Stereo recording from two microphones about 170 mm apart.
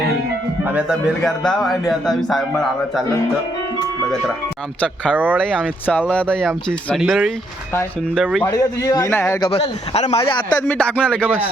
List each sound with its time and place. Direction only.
0.6 s speech: 10° right (ahead or behind)
5.1 s speech: 10° right (ahead or behind)
5.4 s speech: 5° left (ahead or behind)
8.4 s a man's voice: 20° left (ahead or behind)
9.5 s a man's voice: 35° left (ahead or behind)
10.6 s speech: 5° left (ahead or behind)